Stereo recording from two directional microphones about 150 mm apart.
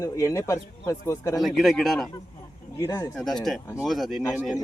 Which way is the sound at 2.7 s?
20° left (ahead or behind).